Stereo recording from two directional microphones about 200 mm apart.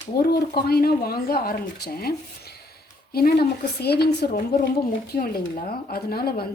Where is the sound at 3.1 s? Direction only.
50° left (ahead or behind).